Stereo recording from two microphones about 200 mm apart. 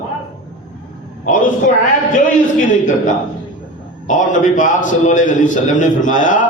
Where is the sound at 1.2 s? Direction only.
40° left (ahead or behind).